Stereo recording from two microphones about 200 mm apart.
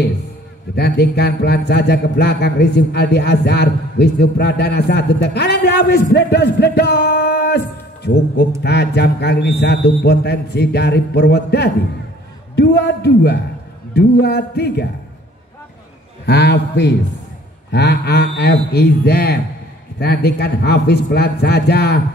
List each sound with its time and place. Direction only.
0.7 s a man's voice: 55° left (ahead or behind)
16.3 s a man's voice: 55° left (ahead or behind)